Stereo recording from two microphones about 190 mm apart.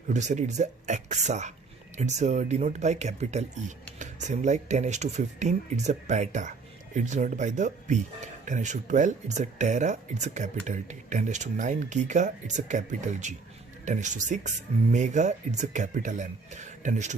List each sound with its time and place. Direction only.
0.1 s speech: 40° right (ahead or behind)